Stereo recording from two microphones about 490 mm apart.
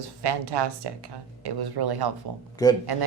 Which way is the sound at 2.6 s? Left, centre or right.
Centre.